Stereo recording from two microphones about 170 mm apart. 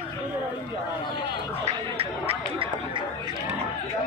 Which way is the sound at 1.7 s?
35° right (ahead or behind).